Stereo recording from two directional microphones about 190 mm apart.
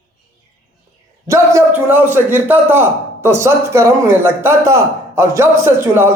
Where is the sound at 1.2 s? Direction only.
15° right (ahead or behind).